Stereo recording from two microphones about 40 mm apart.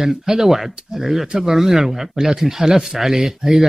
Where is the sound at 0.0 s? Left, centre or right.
Centre.